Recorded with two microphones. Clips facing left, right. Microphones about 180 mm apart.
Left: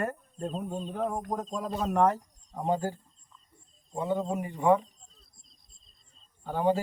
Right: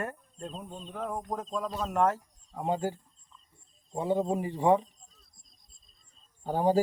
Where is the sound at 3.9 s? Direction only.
25° right (ahead or behind).